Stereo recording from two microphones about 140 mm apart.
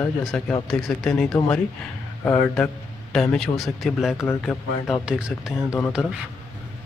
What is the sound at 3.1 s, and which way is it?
Speech, 5° left (ahead or behind).